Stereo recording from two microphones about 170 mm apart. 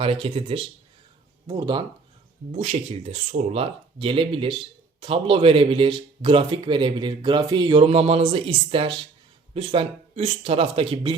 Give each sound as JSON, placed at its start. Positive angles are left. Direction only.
{"t": 0.0, "sound": "speech", "side_deg": -35}
{"t": 2.5, "sound": "speech", "side_deg": -40}